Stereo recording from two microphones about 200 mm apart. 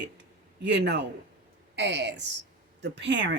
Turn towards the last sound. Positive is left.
turn(degrees=-60)  # may be behind; listen again after turning